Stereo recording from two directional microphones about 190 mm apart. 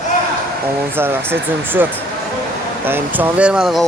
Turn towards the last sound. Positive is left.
turn(degrees=0)  # may be behind; listen again after turning